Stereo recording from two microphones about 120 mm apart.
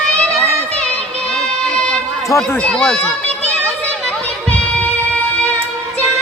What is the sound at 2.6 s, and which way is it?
Speech, 5° left (ahead or behind).